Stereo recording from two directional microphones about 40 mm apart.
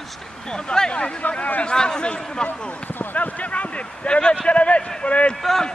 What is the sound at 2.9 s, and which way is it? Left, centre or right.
Speech, left.